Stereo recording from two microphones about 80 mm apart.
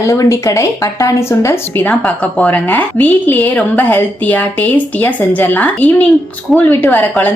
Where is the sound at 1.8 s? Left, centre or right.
Centre.